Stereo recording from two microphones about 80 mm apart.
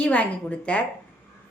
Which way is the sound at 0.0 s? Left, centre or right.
Centre.